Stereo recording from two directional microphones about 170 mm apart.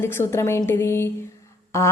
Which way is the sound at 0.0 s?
15° left (ahead or behind).